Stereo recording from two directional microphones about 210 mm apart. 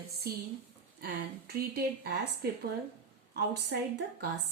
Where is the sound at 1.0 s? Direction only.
45° right (ahead or behind).